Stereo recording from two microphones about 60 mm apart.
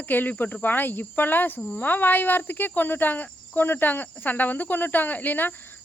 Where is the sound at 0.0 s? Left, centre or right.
Left.